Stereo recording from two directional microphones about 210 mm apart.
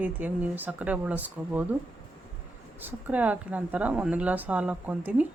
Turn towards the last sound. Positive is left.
turn(degrees=-5)  # may be behind; listen again after turning